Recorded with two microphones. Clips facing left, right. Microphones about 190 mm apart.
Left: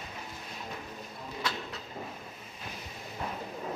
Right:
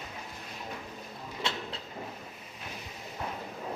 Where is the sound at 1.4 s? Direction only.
25° right (ahead or behind).